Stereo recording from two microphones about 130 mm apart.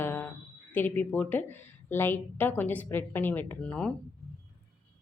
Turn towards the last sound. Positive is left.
turn(degrees=10)  # may be behind; listen again after turning